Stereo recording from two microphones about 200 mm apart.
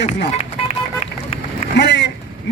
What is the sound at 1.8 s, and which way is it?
Speech, 60° left (ahead or behind).